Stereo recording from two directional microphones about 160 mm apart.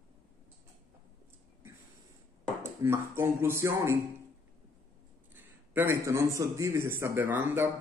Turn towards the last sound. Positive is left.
turn(degrees=-15)  # may be behind; listen again after turning